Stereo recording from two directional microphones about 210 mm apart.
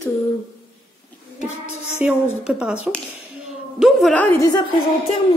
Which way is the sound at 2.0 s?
5° right (ahead or behind).